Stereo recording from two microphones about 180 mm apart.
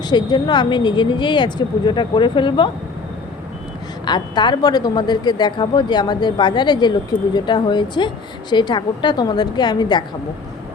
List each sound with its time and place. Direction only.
0.0 s a woman's voice: 25° left (ahead or behind)
4.0 s a woman's voice: 25° left (ahead or behind)